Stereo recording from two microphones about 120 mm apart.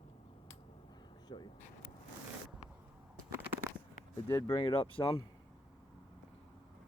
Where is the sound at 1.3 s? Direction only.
40° left (ahead or behind).